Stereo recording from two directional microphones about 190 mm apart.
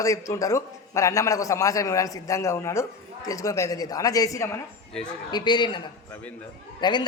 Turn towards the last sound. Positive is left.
turn(degrees=25)  # may be behind; listen again after turning